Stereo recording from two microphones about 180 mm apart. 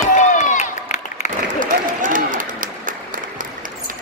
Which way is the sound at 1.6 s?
50° right (ahead or behind).